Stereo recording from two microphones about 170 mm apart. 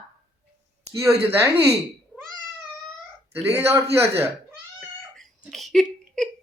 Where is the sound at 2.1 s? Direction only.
10° right (ahead or behind).